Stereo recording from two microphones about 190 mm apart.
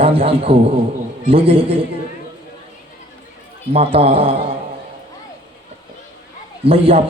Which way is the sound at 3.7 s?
30° right (ahead or behind).